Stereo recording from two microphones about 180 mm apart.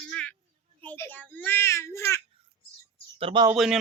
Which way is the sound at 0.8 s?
10° left (ahead or behind).